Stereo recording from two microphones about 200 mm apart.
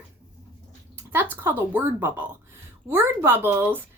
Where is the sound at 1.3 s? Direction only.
10° right (ahead or behind).